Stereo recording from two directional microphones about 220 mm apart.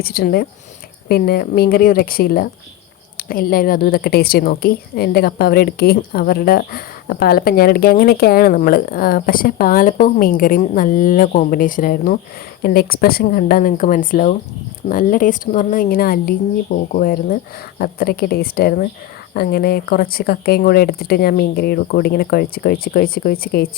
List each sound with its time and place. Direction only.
0.0 s a woman's voice: 45° left (ahead or behind)